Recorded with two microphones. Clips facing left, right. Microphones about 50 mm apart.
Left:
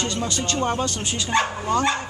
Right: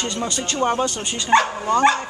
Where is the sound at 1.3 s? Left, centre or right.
Right.